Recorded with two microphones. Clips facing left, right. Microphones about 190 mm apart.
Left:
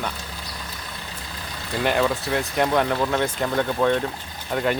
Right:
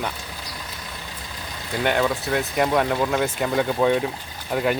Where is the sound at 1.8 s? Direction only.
Centre (ahead or behind).